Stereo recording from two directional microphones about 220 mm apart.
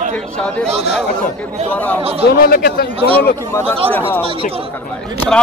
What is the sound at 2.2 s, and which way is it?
Speech, 45° left (ahead or behind).